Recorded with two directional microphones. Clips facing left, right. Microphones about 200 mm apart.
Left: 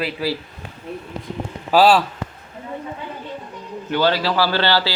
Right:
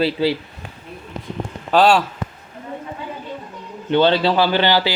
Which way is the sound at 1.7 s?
5° left (ahead or behind).